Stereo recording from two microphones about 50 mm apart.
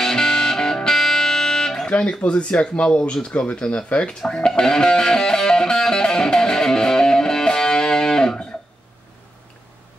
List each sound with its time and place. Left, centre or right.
0.0 s music: centre
1.9 s speech: left
4.3 s music: centre